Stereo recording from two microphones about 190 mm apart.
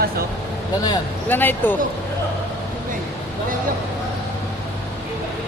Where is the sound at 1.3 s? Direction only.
10° left (ahead or behind).